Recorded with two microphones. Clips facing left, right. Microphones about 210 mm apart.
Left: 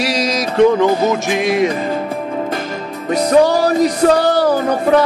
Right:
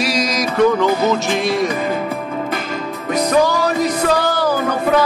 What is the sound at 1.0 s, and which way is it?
Speech, 15° left (ahead or behind).